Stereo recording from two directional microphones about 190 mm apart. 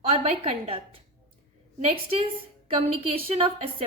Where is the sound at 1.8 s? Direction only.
30° right (ahead or behind).